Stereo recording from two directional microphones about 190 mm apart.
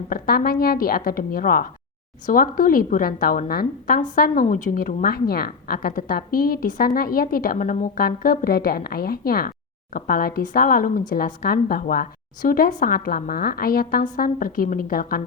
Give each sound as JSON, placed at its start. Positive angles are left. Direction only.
{"t": 0.1, "sound": "a woman's voice", "side_deg": 50}